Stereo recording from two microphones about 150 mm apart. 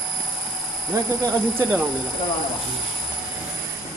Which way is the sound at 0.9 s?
20° right (ahead or behind).